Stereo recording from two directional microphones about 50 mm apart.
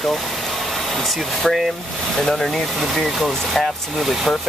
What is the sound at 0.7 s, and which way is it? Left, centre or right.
Speech, centre.